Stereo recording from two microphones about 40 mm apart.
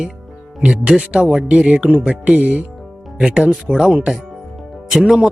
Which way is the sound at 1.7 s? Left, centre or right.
Right.